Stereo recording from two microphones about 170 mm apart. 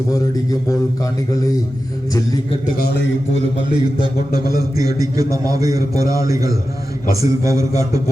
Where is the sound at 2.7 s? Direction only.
75° left (ahead or behind).